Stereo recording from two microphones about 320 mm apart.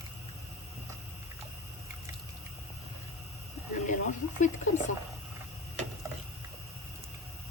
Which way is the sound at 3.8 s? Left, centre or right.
Left.